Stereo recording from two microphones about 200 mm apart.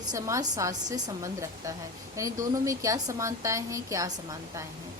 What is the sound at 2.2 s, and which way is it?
Speech, 15° right (ahead or behind).